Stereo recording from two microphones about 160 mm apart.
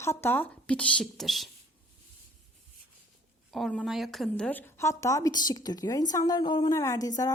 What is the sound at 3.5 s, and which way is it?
A woman's voice, centre (ahead or behind).